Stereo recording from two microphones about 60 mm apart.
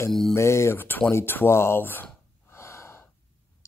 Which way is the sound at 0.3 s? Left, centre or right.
Left.